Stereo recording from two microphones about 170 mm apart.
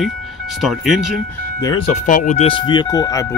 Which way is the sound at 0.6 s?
Centre (ahead or behind).